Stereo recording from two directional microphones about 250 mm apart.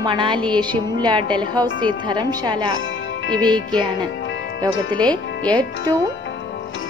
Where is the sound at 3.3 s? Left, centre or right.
Centre.